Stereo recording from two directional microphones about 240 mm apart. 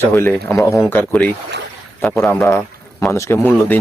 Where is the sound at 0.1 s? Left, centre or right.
Centre.